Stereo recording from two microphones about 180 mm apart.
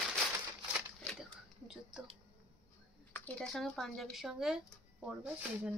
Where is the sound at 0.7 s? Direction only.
5° right (ahead or behind).